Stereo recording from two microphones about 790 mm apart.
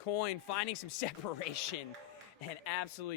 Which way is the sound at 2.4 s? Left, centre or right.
Left.